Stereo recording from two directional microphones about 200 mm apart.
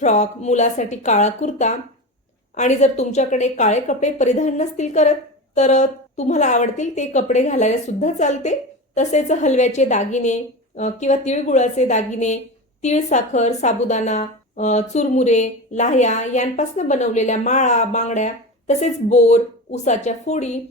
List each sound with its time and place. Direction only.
0.0 s a woman's voice: 35° left (ahead or behind)